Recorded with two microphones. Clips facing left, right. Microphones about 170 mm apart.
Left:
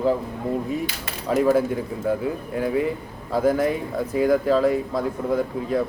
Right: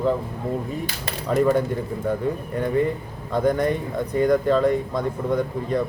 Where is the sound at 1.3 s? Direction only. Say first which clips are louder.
Left 1 dB; 5° left (ahead or behind).